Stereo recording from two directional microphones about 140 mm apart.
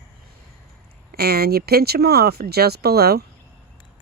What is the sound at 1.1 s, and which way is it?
Speech, 90° right.